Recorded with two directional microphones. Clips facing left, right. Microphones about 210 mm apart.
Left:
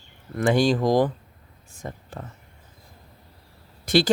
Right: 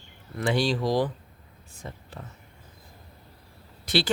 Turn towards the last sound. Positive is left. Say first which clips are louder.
# left 6 dB
turn(degrees=45)  # may be behind; listen again after turning